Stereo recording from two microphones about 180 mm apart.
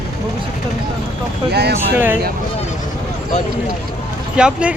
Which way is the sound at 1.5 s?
65° right (ahead or behind).